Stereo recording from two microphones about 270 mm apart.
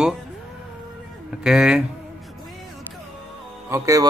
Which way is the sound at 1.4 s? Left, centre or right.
Centre.